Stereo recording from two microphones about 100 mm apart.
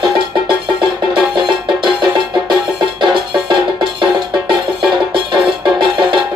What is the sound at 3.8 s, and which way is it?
Music, 55° right (ahead or behind).